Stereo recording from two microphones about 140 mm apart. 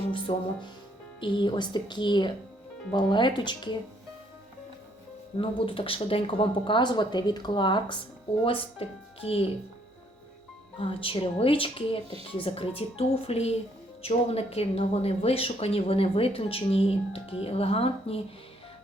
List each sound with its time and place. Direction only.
0.1 s speech: 35° left (ahead or behind)
5.4 s speech: 40° left (ahead or behind)
10.8 s a woman's voice: 40° left (ahead or behind)